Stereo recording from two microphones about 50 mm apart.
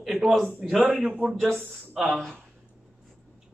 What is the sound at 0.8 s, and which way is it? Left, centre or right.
Speech, centre.